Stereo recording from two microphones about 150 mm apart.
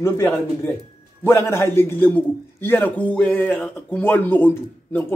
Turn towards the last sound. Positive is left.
turn(degrees=10)  # may be behind; listen again after turning